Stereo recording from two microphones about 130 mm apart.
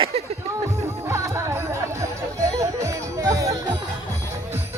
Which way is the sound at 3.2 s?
30° right (ahead or behind).